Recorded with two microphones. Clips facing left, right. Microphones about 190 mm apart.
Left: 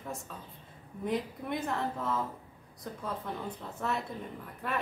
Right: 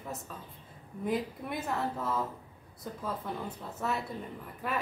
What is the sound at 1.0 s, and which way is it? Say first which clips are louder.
A woman's voice: right 1 dB; 5° right (ahead or behind).